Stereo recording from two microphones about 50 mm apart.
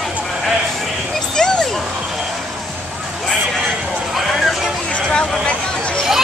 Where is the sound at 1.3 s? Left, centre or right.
Centre.